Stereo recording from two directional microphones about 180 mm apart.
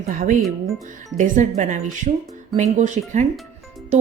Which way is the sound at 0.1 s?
45° right (ahead or behind).